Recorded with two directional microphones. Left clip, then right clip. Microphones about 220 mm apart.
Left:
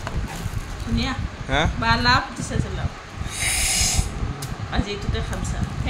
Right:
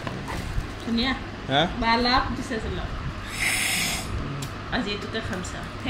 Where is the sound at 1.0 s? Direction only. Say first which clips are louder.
Right 1 dB; 25° left (ahead or behind).